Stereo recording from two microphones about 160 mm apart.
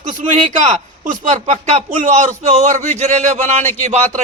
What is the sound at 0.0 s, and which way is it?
A man's voice, 50° right (ahead or behind).